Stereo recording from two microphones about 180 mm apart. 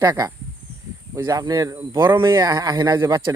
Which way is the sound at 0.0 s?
20° right (ahead or behind).